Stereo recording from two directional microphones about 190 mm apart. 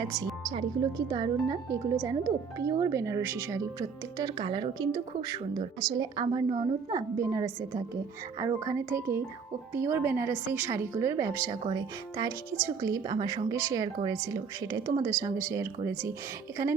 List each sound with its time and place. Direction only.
0.5 s a woman's voice: 20° right (ahead or behind)